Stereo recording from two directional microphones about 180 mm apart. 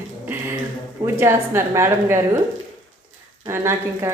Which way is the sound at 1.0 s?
15° right (ahead or behind).